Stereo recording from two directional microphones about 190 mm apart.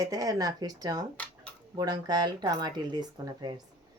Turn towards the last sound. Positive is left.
turn(degrees=-25)  # may be behind; listen again after turning